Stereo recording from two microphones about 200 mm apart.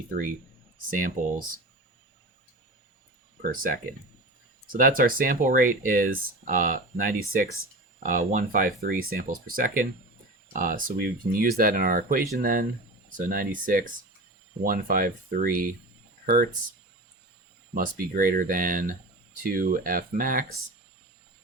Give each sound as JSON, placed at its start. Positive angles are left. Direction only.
{"t": 0.9, "sound": "speech", "side_deg": -45}
{"t": 3.4, "sound": "speech", "side_deg": -45}
{"t": 17.7, "sound": "speech", "side_deg": -45}